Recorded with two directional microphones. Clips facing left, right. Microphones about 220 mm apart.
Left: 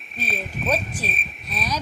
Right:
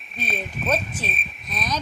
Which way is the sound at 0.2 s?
Centre (ahead or behind).